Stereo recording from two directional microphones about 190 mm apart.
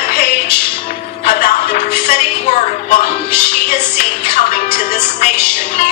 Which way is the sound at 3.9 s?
40° left (ahead or behind).